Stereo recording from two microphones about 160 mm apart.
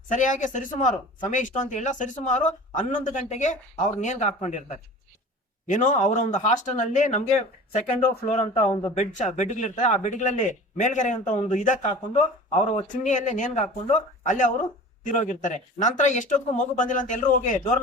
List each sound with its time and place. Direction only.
0.1 s speech: 50° left (ahead or behind)